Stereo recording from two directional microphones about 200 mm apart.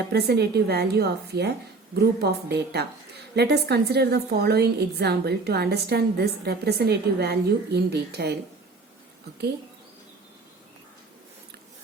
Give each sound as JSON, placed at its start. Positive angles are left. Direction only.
{"t": 0.1, "sound": "a woman's voice", "side_deg": -55}